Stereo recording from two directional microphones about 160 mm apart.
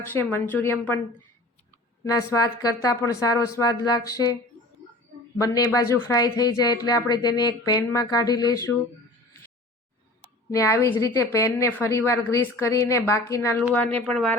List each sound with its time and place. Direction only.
0.0 s a woman's voice: 15° left (ahead or behind)
2.3 s speech: 20° left (ahead or behind)
5.4 s speech: 20° left (ahead or behind)
10.5 s a woman's voice: 20° left (ahead or behind)